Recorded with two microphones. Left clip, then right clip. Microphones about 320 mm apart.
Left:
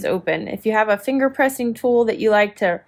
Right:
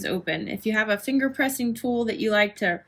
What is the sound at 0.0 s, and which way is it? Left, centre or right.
Speech, left.